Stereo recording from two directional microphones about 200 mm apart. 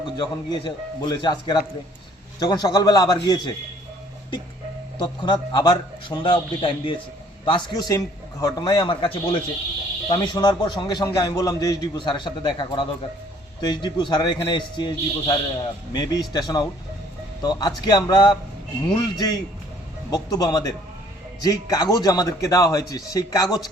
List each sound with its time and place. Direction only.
0.2 s a man's voice: 20° left (ahead or behind)
4.9 s a man's voice: 20° left (ahead or behind)